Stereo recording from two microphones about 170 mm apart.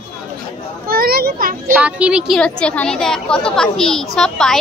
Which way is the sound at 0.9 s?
60° right (ahead or behind).